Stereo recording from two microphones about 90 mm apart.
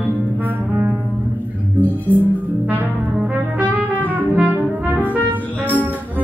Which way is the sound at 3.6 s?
20° right (ahead or behind).